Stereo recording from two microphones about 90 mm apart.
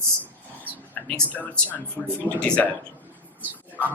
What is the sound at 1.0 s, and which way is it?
Speech, 15° left (ahead or behind).